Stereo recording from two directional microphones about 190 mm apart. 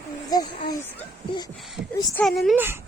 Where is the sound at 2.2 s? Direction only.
Centre (ahead or behind).